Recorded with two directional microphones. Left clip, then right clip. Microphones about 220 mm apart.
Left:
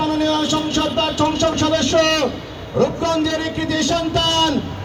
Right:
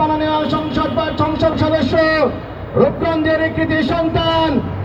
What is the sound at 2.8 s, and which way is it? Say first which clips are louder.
A man's voice: right 3 dB; 45° left (ahead or behind).